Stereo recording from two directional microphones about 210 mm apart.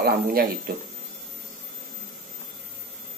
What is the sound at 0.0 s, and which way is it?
Speech, 45° right (ahead or behind).